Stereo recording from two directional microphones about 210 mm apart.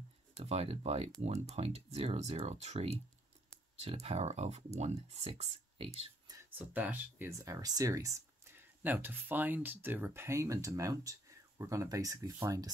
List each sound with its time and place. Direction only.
0.4 s speech: 30° right (ahead or behind)
5.9 s a sound: 20° right (ahead or behind)
6.7 s speech: 10° right (ahead or behind)